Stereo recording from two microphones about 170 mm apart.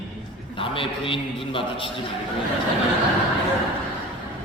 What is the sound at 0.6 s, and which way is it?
A man's voice, 30° left (ahead or behind).